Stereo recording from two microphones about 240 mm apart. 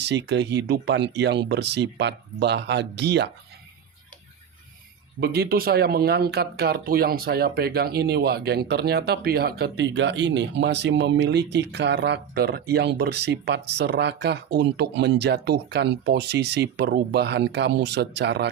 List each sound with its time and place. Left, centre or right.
0.0 s speech: right
5.2 s speech: right